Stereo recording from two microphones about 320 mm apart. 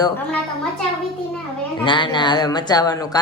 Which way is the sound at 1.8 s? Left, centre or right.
Centre.